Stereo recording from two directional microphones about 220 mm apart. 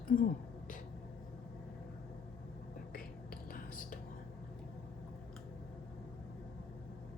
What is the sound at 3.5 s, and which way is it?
Whispering, 40° left (ahead or behind).